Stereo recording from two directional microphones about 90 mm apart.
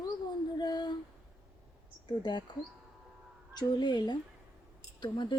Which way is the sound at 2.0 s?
55° left (ahead or behind).